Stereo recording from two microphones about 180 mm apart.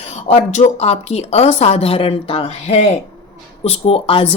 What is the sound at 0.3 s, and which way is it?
Speech, 40° left (ahead or behind).